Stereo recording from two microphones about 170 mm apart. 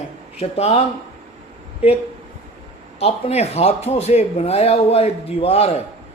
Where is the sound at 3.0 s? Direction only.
35° left (ahead or behind).